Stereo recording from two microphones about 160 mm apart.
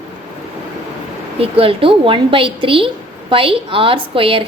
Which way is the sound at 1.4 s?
35° right (ahead or behind).